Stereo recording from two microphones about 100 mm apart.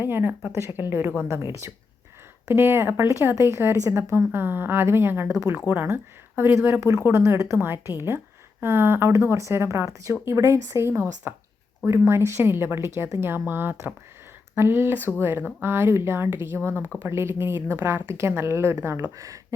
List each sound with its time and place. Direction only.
0.0 s speech: 20° right (ahead or behind)